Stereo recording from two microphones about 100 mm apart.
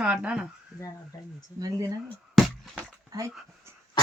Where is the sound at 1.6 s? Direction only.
35° right (ahead or behind).